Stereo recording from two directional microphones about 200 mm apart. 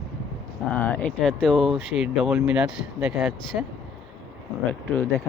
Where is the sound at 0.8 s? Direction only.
10° left (ahead or behind).